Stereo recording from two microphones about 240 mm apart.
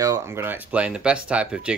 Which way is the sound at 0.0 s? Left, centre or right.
Centre.